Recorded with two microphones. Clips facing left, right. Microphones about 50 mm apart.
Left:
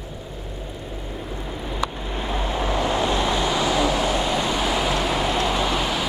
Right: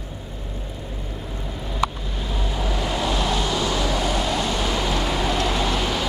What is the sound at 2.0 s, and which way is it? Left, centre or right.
Vehicle, left.